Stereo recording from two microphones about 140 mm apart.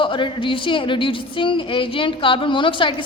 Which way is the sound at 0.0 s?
35° left (ahead or behind).